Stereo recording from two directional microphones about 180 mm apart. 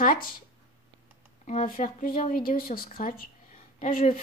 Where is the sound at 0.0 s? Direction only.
50° left (ahead or behind).